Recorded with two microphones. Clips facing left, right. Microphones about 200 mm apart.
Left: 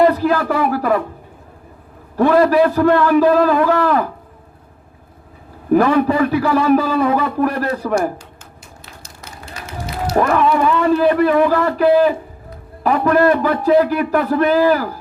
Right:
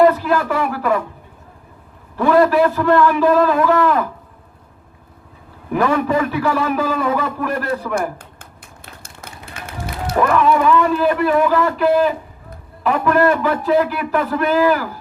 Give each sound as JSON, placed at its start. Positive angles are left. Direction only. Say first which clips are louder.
{"t": 0.1, "sound": "a man's voice", "louder": "left 2 dB", "side_deg": 40}
{"t": 2.1, "sound": "a man's voice", "louder": "left 1 dB", "side_deg": 40}
{"t": 5.7, "sound": "a man's voice", "louder": "left 4 dB", "side_deg": 40}
{"t": 8.2, "sound": "run", "louder": "left 1 dB", "side_deg": -55}
{"t": 10.2, "sound": "a man's voice", "louder": "even", "side_deg": 40}